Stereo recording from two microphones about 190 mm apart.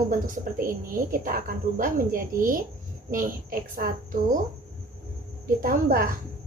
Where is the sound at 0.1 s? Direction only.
45° right (ahead or behind).